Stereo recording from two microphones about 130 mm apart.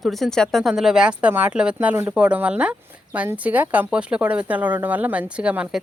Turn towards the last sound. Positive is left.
turn(degrees=-10)  # may be behind; listen again after turning